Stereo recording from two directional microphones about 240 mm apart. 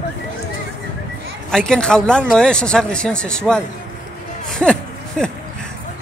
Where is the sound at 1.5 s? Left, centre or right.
Centre.